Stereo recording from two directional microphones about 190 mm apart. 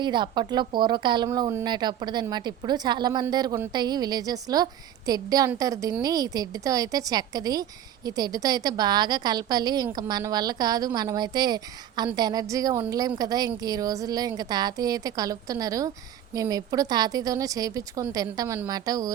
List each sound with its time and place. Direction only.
0.0 s a woman's voice: 25° right (ahead or behind)